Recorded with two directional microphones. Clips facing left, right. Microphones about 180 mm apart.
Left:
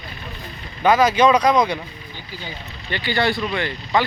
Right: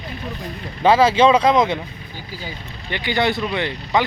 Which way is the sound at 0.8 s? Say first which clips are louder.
Right 2 dB; 30° right (ahead or behind).